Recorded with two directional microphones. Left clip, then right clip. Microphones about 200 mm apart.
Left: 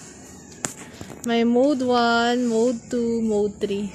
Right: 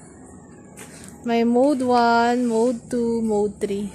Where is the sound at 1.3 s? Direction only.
Centre (ahead or behind).